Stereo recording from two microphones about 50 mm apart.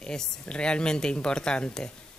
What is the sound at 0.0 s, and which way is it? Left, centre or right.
Speech, centre.